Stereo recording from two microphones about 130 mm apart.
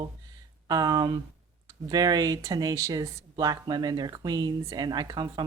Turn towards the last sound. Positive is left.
turn(degrees=-35)  # may be behind; listen again after turning